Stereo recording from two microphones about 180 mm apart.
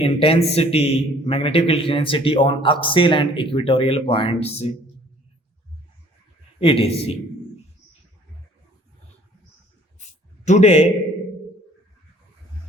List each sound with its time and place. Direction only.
0.0 s a man's voice: 30° left (ahead or behind)
6.6 s a man's voice: 30° left (ahead or behind)
10.4 s a man's voice: 40° left (ahead or behind)